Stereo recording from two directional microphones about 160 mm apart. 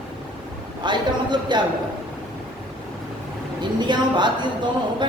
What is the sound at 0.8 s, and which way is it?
Speech, 30° right (ahead or behind).